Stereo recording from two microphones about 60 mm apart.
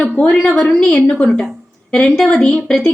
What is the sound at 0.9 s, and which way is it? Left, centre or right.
Speech, centre.